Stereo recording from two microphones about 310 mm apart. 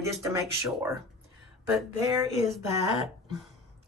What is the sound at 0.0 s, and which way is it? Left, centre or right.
Speech, centre.